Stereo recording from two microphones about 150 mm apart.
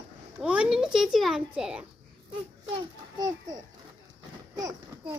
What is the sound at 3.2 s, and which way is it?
A child's voice, 25° right (ahead or behind).